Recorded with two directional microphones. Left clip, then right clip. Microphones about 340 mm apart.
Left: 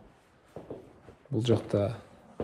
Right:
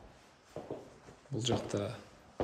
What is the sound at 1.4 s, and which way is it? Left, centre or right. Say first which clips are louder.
Speech: left 7 dB; centre.